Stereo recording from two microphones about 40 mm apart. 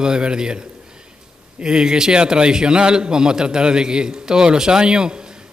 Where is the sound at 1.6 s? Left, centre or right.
Centre.